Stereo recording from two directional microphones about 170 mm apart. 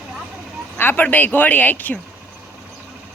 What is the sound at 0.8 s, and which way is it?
Speech, 10° left (ahead or behind).